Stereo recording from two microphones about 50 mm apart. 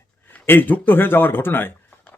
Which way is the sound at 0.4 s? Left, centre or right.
Left.